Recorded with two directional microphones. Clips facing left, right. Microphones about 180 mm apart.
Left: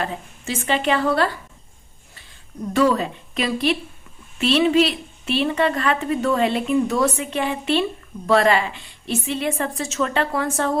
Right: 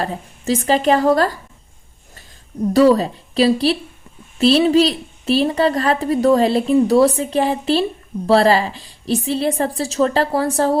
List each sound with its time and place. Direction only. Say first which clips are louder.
0.0 s a woman's voice: right 4 dB; 35° right (ahead or behind)
2.7 s a woman's voice: right 6 dB; 35° right (ahead or behind)